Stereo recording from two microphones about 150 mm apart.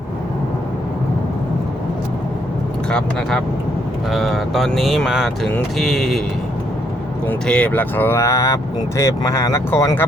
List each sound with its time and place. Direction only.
2.9 s speech: 5° left (ahead or behind)
7.3 s speech: 5° left (ahead or behind)